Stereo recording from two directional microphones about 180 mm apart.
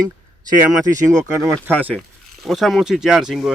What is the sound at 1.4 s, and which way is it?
Speech, 10° right (ahead or behind).